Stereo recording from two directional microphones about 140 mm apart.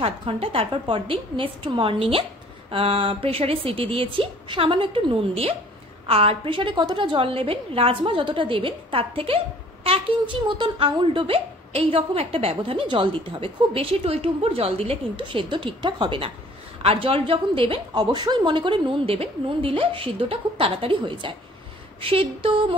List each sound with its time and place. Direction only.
0.0 s a woman's voice: 40° right (ahead or behind)